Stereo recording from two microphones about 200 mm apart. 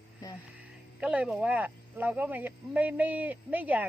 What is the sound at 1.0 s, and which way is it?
Speech, 5° right (ahead or behind).